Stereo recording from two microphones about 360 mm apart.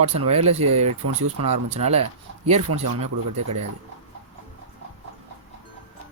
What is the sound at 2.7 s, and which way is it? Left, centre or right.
Speech, right.